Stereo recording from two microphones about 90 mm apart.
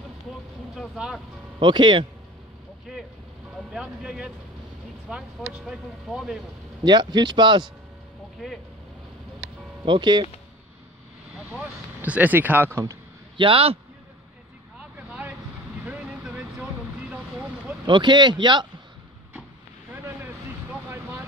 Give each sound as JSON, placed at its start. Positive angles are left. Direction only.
{"t": 0.9, "sound": "speech", "side_deg": -5}
{"t": 1.6, "sound": "speech", "side_deg": -55}
{"t": 2.9, "sound": "vehicle", "side_deg": -5}
{"t": 3.5, "sound": "speech", "side_deg": -10}
{"t": 6.8, "sound": "speech", "side_deg": -55}
{"t": 8.4, "sound": "speech", "side_deg": 0}
{"t": 9.8, "sound": "speech", "side_deg": -60}
{"t": 11.3, "sound": "speech", "side_deg": -15}
{"t": 13.4, "sound": "a man's voice", "side_deg": -85}
{"t": 14.8, "sound": "vehicle", "side_deg": -15}
{"t": 17.8, "sound": "speech", "side_deg": -60}